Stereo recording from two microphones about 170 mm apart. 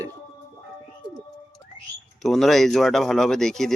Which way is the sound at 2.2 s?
Centre (ahead or behind).